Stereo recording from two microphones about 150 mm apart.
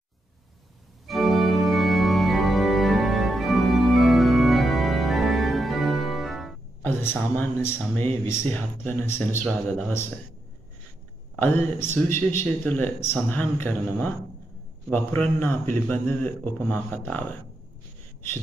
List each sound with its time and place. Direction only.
1.0 s organ: centre (ahead or behind)
6.8 s a sound: 15° left (ahead or behind)
7.3 s speech: 10° left (ahead or behind)
9.5 s speech: 5° left (ahead or behind)
11.4 s speech: 15° left (ahead or behind)